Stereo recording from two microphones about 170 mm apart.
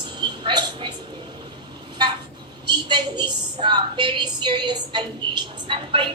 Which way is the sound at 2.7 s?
25° right (ahead or behind).